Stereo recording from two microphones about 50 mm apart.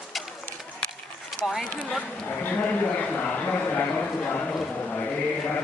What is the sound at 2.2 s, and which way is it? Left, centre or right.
A man's voice, left.